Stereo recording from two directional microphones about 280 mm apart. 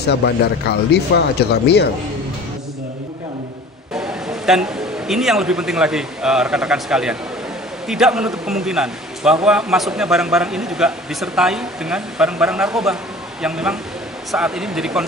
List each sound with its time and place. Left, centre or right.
0.0 s speech: left
4.5 s a man's voice: centre